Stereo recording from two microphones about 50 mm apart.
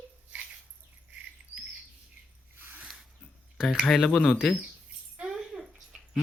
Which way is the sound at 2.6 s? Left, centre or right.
Right.